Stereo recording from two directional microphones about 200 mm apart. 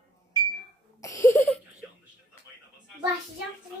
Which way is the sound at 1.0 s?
15° left (ahead or behind).